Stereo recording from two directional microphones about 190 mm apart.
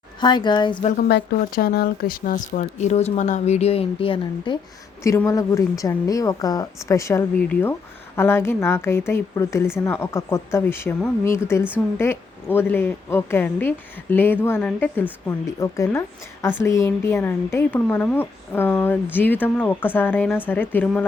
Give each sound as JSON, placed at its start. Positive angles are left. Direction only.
{"t": 0.2, "sound": "speech", "side_deg": 25}
{"t": 0.9, "sound": "speech", "side_deg": 55}
{"t": 5.0, "sound": "a woman's voice", "side_deg": 15}